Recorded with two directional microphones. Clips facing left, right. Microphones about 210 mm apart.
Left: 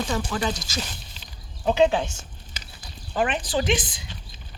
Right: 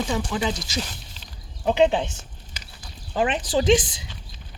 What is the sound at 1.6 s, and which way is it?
Speech, 20° right (ahead or behind).